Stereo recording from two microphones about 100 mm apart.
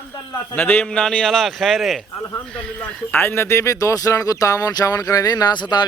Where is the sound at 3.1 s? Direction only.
20° left (ahead or behind).